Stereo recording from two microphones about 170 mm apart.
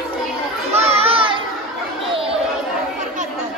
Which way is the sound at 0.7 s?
35° right (ahead or behind).